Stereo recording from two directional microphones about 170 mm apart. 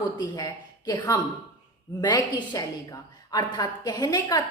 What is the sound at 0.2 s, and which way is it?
A woman's voice, 20° left (ahead or behind).